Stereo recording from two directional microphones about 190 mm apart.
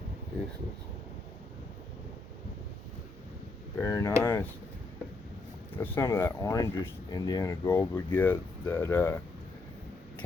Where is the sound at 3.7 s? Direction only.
15° left (ahead or behind).